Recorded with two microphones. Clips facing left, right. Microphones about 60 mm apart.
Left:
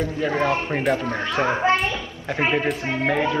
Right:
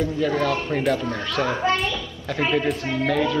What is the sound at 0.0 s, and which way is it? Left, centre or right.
Speech, left.